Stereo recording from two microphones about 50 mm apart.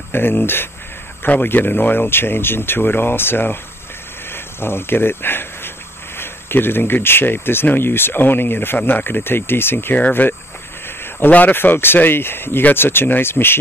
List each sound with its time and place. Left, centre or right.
0.1 s speech: left
4.3 s a sound: left
6.1 s speech: left
9.9 s speech: left
11.5 s speech: left